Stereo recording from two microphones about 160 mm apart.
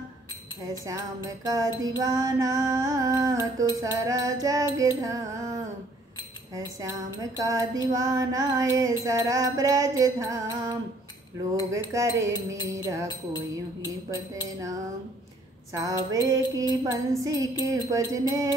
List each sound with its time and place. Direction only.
0.8 s music: 20° right (ahead or behind)
14.1 s music: 20° right (ahead or behind)